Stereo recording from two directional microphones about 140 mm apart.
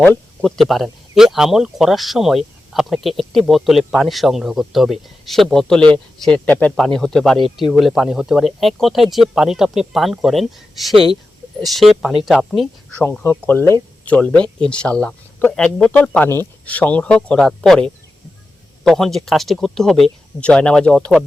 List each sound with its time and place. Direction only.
0.0 s speech: 5° left (ahead or behind)
13.1 s speech: 15° left (ahead or behind)
18.9 s speech: centre (ahead or behind)